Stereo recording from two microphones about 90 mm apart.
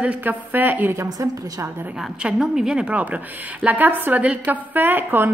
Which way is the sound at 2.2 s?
5° right (ahead or behind).